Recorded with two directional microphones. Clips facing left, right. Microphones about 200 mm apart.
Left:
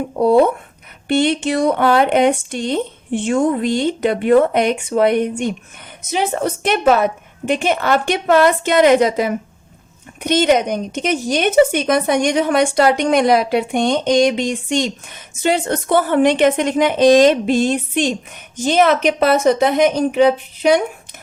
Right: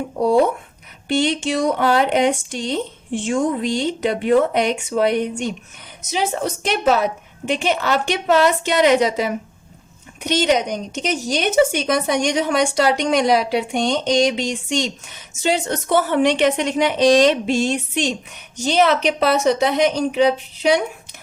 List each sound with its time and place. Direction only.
0.2 s a woman's voice: 55° left (ahead or behind)